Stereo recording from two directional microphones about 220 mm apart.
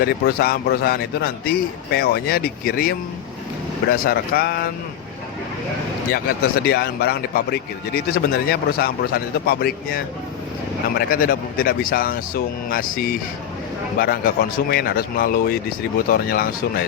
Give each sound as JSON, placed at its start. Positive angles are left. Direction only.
{"t": 0.0, "sound": "a man's voice", "side_deg": 45}
{"t": 6.1, "sound": "a man's voice", "side_deg": 45}